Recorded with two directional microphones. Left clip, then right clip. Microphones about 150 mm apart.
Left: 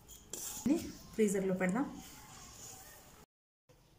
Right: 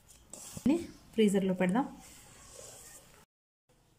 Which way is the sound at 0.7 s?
65° right (ahead or behind).